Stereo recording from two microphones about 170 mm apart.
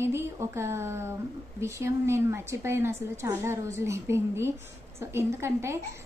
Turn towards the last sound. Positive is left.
turn(degrees=-15)  # may be behind; listen again after turning